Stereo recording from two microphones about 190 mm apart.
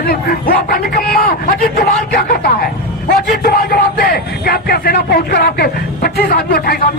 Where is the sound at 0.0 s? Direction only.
50° left (ahead or behind).